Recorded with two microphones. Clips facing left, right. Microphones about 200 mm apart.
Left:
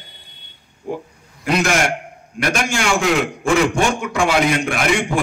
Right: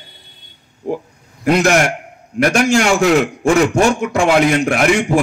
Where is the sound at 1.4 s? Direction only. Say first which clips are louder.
Right 5 dB; 45° right (ahead or behind).